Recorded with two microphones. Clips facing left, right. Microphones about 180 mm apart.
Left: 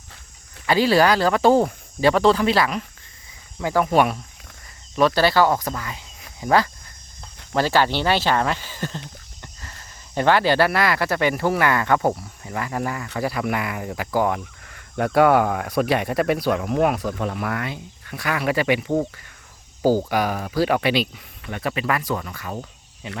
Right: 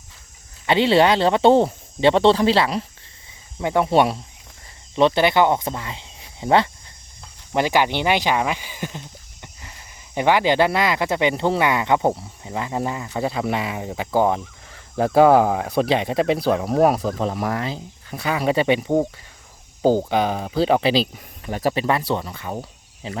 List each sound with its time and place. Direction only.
0.7 s speech: 25° right (ahead or behind)
22.2 s speech: 15° right (ahead or behind)